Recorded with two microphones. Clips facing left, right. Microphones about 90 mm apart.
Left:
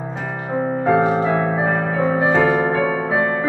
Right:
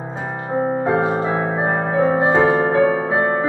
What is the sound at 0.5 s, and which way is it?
Music, 25° right (ahead or behind).